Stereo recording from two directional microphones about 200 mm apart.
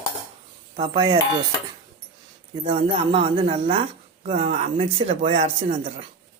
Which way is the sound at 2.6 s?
25° right (ahead or behind).